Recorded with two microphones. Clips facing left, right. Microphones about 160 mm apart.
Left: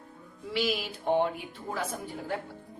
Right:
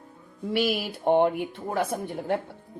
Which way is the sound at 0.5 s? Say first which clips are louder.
Right 4 dB; 55° right (ahead or behind).